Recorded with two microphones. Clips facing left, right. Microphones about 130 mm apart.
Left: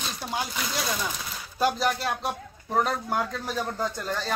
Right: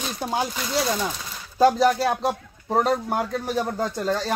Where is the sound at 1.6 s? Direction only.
35° right (ahead or behind).